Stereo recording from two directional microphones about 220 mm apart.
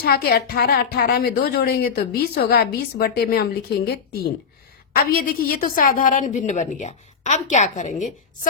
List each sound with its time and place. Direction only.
0.0 s a woman's voice: 45° left (ahead or behind)